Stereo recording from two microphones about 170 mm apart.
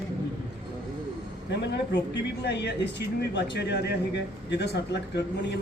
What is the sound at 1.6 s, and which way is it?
Speech, 90° left.